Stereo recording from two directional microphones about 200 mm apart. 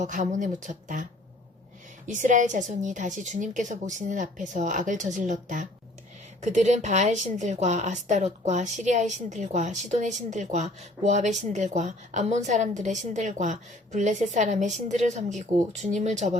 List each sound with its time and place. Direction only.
0.0 s a woman's voice: 40° right (ahead or behind)
2.0 s a woman's voice: 40° right (ahead or behind)